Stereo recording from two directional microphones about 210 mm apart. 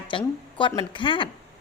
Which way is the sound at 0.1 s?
25° left (ahead or behind).